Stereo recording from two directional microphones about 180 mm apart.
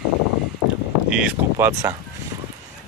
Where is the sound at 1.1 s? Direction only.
5° right (ahead or behind).